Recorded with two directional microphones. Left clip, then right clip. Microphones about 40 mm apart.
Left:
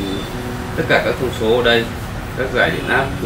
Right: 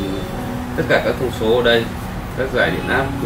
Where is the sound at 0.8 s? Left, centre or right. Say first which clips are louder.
Left 1 dB; centre.